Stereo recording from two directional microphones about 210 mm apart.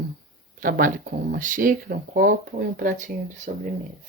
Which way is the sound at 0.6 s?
40° right (ahead or behind).